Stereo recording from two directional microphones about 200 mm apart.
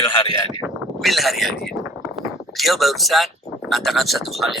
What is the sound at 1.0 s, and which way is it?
Speech, centre (ahead or behind).